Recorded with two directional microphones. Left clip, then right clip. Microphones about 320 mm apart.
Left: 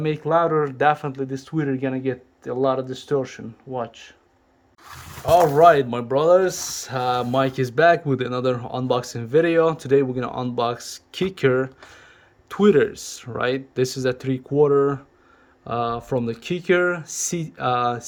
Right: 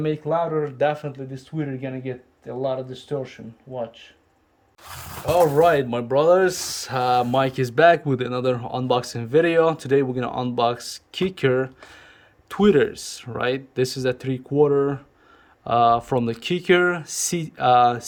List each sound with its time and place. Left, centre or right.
0.0 s speech: centre
4.9 s speech: right
5.2 s speech: centre